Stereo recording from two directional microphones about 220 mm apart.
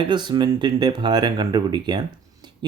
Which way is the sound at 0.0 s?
20° right (ahead or behind).